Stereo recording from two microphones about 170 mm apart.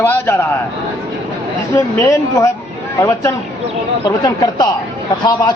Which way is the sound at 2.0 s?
20° left (ahead or behind).